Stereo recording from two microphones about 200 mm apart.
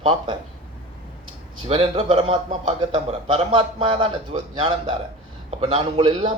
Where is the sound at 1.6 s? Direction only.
30° right (ahead or behind).